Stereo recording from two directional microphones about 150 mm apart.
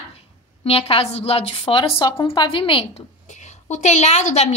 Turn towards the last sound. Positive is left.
turn(degrees=50)  # may be behind; listen again after turning